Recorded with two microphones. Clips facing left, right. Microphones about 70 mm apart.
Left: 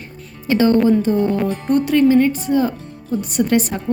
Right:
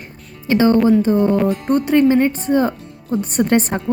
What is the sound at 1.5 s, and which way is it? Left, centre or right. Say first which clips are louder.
A woman's voice: right 1 dB; right.